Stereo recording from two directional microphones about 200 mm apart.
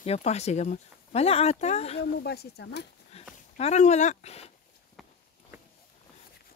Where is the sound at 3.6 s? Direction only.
35° left (ahead or behind).